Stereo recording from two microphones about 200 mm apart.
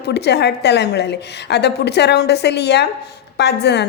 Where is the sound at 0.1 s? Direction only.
55° left (ahead or behind).